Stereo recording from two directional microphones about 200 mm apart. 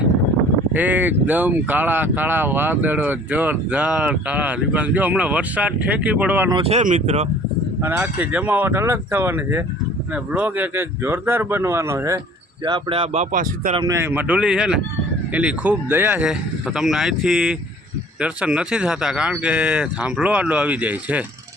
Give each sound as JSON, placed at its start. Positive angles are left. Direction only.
{"t": 0.8, "sound": "speech", "side_deg": -10}
{"t": 6.5, "sound": "speech", "side_deg": -30}
{"t": 7.8, "sound": "speech", "side_deg": -10}
{"t": 12.6, "sound": "speech", "side_deg": -25}
{"t": 13.3, "sound": "speech", "side_deg": -40}
{"t": 13.7, "sound": "speech", "side_deg": -15}